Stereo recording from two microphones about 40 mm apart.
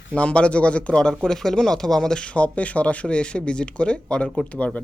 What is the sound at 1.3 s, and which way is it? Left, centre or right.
Speech, centre.